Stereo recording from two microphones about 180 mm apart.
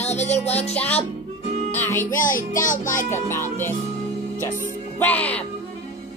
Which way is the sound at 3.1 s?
15° left (ahead or behind).